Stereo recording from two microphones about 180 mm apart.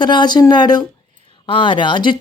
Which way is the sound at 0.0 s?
25° left (ahead or behind).